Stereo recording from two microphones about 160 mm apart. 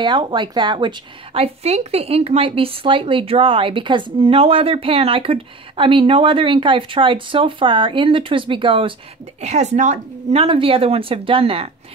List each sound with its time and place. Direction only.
0.0 s speech: 30° right (ahead or behind)
9.4 s a woman's voice: 45° right (ahead or behind)
10.4 s speech: 35° right (ahead or behind)